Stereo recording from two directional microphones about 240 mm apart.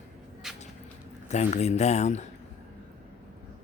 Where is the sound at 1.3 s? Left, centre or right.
Left.